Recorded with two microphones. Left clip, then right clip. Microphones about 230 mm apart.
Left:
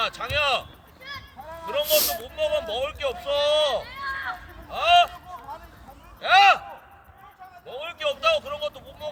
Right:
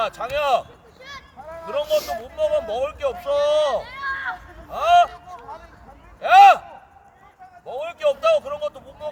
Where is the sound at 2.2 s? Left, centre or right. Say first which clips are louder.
Right 4 dB; right.